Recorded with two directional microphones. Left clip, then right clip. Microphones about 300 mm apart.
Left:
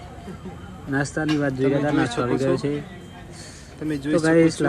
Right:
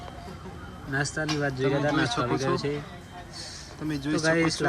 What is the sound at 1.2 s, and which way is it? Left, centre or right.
Speech, left.